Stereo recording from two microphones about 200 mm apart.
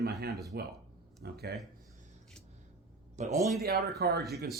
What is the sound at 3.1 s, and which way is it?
Speech, 35° right (ahead or behind).